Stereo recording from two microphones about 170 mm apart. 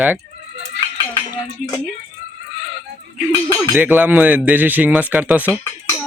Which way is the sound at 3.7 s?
10° right (ahead or behind).